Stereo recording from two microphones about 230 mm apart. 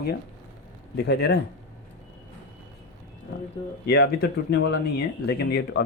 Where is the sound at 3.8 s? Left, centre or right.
Left.